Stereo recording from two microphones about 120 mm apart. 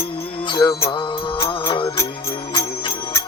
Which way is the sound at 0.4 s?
40° left (ahead or behind).